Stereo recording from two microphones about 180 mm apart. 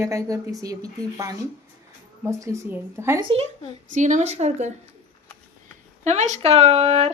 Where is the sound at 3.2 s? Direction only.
30° right (ahead or behind).